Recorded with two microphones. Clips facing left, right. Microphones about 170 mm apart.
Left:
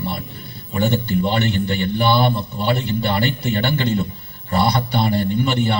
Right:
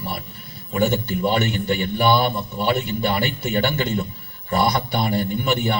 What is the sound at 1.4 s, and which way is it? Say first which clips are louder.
A man's voice: left 2 dB; 35° left (ahead or behind).